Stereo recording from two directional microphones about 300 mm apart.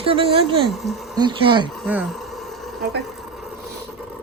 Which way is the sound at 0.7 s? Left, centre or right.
Centre.